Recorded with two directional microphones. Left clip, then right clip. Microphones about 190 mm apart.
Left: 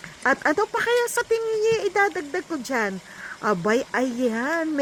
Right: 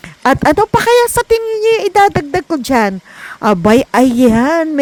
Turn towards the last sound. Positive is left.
turn(degrees=-40)  # may be behind; listen again after turning